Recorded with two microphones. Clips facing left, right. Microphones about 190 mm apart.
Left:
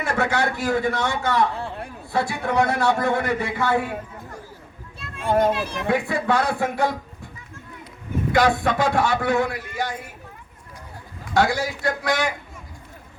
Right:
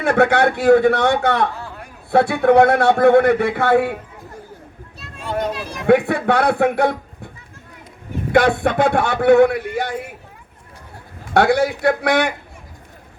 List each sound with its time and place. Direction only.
0.0 s a man's voice: 60° right (ahead or behind)
1.5 s a sound: 30° left (ahead or behind)
2.0 s a man's voice: 60° right (ahead or behind)
4.9 s children playing: 50° left (ahead or behind)
5.9 s a man's voice: 60° right (ahead or behind)
8.3 s a man's voice: 60° right (ahead or behind)
11.3 s a man's voice: 60° right (ahead or behind)